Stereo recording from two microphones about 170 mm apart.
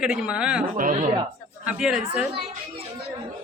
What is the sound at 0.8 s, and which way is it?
Speech, 50° right (ahead or behind).